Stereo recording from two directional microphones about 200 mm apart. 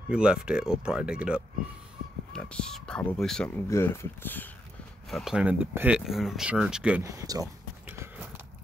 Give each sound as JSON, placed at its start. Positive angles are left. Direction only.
{"t": 0.1, "sound": "speech", "side_deg": -5}
{"t": 5.1, "sound": "speech", "side_deg": 0}
{"t": 7.0, "sound": "speech", "side_deg": -15}